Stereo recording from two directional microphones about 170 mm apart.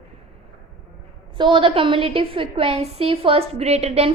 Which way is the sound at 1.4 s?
30° right (ahead or behind).